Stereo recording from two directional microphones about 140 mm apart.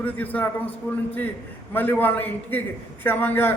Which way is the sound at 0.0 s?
10° left (ahead or behind).